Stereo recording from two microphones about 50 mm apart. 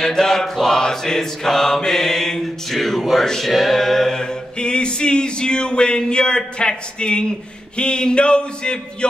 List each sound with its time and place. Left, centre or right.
0.0 s mantra: centre
3.0 s music: centre
3.3 s a capella: centre